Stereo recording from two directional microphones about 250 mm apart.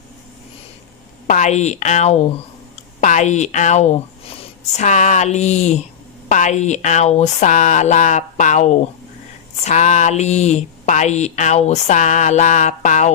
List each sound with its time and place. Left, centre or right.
1.3 s speech: left